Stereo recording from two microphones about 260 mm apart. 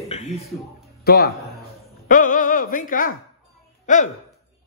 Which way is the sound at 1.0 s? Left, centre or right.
Left.